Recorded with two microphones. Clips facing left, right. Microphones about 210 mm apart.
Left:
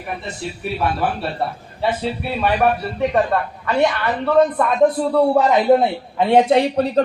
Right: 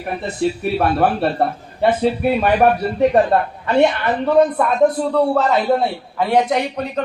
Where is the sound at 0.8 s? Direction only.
55° right (ahead or behind).